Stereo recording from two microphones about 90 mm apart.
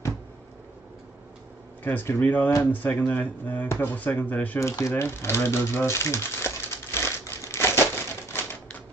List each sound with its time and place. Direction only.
1.8 s speech: 20° left (ahead or behind)
4.6 s typewriter: 35° left (ahead or behind)